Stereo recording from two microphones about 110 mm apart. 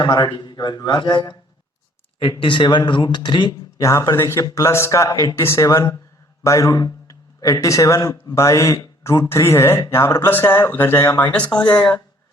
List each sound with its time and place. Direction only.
0.0 s a man's voice: 40° left (ahead or behind)
2.4 s a man's voice: 45° left (ahead or behind)
3.8 s speech: 30° left (ahead or behind); by 11.9 s 10° left (ahead or behind)